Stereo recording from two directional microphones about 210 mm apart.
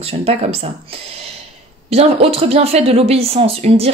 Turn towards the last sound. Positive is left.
turn(degrees=-30)  # may be behind; listen again after turning